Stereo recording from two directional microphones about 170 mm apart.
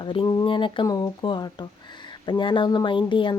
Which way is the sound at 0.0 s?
30° left (ahead or behind).